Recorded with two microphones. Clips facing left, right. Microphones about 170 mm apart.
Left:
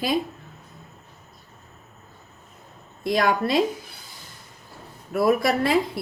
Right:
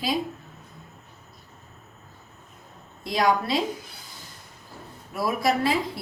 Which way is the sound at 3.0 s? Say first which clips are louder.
Left 2 dB; 55° left (ahead or behind).